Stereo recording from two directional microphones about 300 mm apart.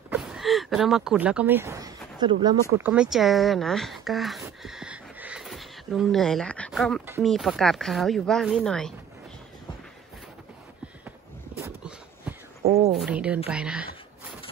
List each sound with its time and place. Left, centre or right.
0.1 s speech: centre
2.9 s speech: centre
11.1 s a sound: centre
12.6 s a woman's voice: right
12.9 s a woman's voice: centre